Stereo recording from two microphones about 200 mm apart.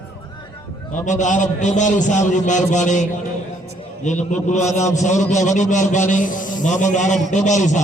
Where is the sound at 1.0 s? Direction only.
40° left (ahead or behind).